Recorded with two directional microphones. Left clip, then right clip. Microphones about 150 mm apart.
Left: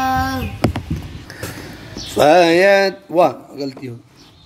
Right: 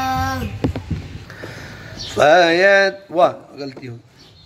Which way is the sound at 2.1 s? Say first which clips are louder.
Left 1 dB; 35° left (ahead or behind).